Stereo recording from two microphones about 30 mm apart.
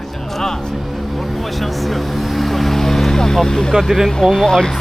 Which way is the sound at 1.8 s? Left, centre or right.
Centre.